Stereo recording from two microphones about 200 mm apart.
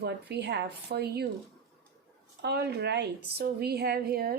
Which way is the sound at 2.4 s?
55° right (ahead or behind).